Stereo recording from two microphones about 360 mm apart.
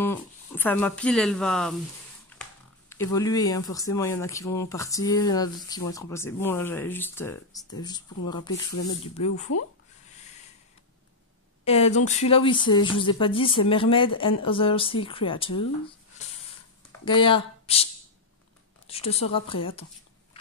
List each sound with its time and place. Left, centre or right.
0.0 s speech: centre
2.9 s speech: centre
8.2 s speech: left
11.6 s speech: centre
17.0 s speech: centre
18.9 s speech: centre